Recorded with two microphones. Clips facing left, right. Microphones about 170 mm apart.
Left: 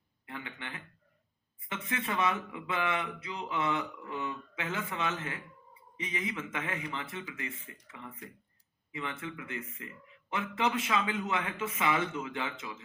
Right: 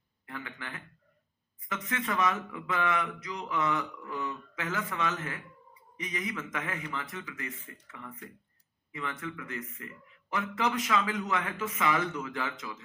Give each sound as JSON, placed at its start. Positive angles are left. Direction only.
{"t": 0.3, "sound": "speech", "side_deg": 25}